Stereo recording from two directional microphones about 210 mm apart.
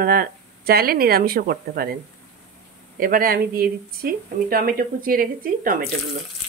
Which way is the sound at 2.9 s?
45° right (ahead or behind).